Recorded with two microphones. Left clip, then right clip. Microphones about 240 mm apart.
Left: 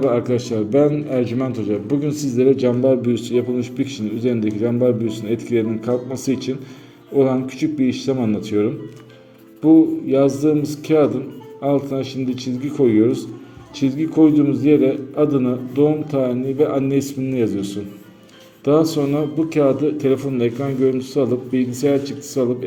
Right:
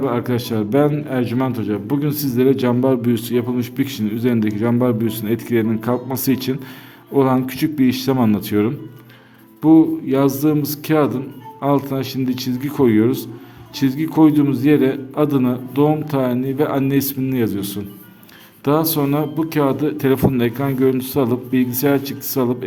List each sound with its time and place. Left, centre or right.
0.0 s a man's voice: right
10.1 s a man's voice: right